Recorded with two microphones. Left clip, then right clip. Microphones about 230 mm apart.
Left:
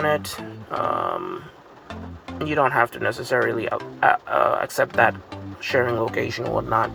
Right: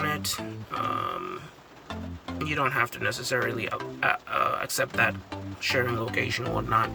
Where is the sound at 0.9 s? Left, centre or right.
Centre.